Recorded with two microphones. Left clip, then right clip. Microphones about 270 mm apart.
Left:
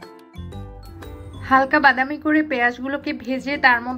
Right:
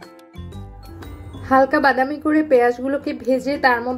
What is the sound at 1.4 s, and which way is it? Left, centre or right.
A woman's voice, left.